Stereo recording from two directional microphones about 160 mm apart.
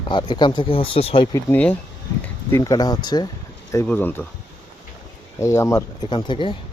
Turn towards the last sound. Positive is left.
turn(degrees=30)  # may be behind; listen again after turning